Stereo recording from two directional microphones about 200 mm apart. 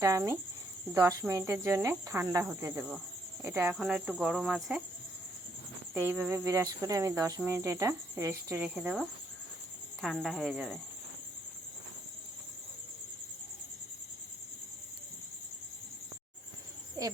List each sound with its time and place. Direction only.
0.0 s speech: 15° right (ahead or behind)
5.9 s speech: 10° right (ahead or behind)
17.0 s a woman's voice: 20° right (ahead or behind)